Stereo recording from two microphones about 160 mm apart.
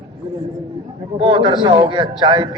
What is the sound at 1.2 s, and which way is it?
A man's voice, 30° right (ahead or behind).